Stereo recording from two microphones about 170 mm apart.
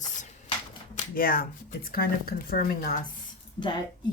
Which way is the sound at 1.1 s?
60° left (ahead or behind).